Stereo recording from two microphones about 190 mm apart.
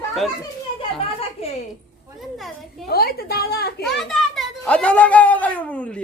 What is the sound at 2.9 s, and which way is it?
Speech, 55° left (ahead or behind).